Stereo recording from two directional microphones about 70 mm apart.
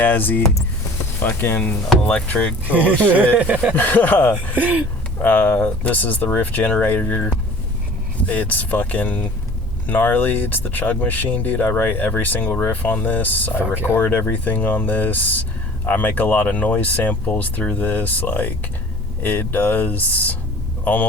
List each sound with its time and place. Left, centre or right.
0.0 s speech: left
2.6 s speech: right
3.8 s speech: left
4.5 s speech: right
5.2 s speech: left
8.3 s a man's voice: left